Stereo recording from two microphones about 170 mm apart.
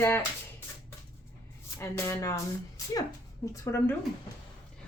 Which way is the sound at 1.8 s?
20° left (ahead or behind).